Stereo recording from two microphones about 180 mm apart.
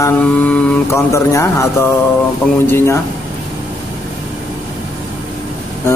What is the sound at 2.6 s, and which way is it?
Mantra, 15° left (ahead or behind).